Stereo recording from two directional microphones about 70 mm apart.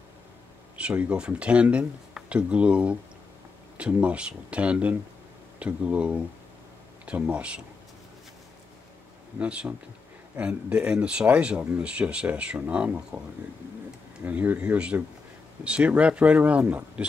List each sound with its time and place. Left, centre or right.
0.7 s speech: centre
9.4 s speech: centre
13.1 s speech: right